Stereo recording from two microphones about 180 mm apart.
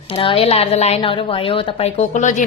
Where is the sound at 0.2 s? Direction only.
30° left (ahead or behind).